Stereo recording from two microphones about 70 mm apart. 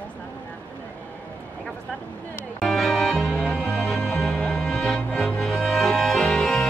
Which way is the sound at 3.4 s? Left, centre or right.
Left.